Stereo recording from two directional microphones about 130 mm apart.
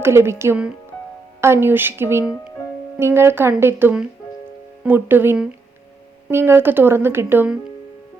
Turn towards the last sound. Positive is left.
turn(degrees=-15)  # may be behind; listen again after turning